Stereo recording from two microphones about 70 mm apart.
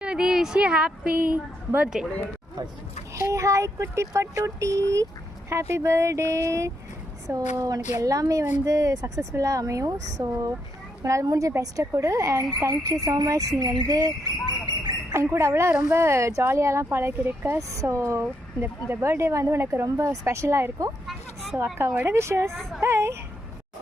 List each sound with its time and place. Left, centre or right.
0.0 s speech: centre
1.3 s a woman's voice: right
3.2 s speech: right
7.3 s speech: right
15.1 s speech: right
17.6 s speech: right
21.1 s a sound: centre
21.6 s speech: right